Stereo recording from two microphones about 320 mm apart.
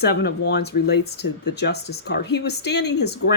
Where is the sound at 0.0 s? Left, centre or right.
Left.